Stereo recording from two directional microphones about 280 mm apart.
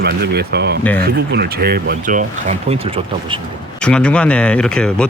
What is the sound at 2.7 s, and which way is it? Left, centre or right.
Speech, centre.